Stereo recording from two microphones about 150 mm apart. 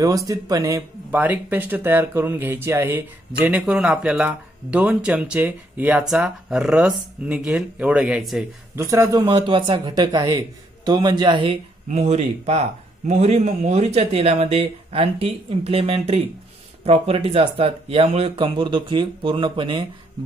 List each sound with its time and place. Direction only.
0.0 s speech: 25° right (ahead or behind); by 8.5 s centre (ahead or behind)
8.7 s a man's voice: 20° right (ahead or behind)
9.2 s a man's voice: 35° right (ahead or behind)
11.9 s speech: 45° right (ahead or behind)